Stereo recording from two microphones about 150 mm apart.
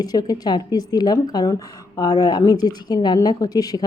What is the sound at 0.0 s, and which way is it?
Speech, 25° left (ahead or behind).